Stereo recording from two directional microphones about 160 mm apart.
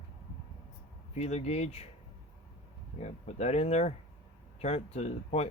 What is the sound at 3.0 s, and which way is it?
Speech, 45° left (ahead or behind).